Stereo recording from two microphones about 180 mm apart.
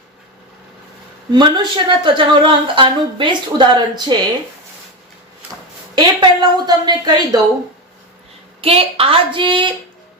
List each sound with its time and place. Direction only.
1.3 s speech: 25° right (ahead or behind)
5.9 s speech: 25° right (ahead or behind)
8.6 s a woman's voice: 30° right (ahead or behind)